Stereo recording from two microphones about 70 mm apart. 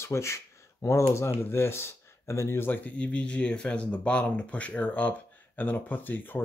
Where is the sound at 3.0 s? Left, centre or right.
Centre.